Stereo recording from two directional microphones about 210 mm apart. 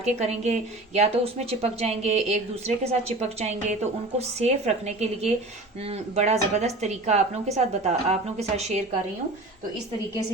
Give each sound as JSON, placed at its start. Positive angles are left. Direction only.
{"t": 0.0, "sound": "speech", "side_deg": -30}